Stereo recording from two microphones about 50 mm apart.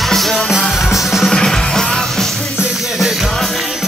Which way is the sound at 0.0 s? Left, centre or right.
Centre.